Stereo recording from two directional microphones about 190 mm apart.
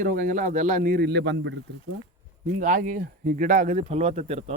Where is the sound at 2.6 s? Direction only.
45° right (ahead or behind).